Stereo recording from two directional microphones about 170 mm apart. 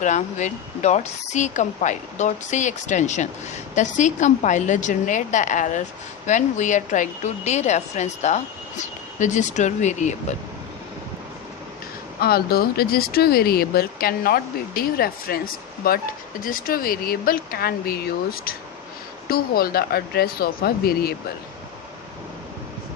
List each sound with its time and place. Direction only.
0.0 s a woman's voice: 45° left (ahead or behind)
12.2 s speech: 65° left (ahead or behind)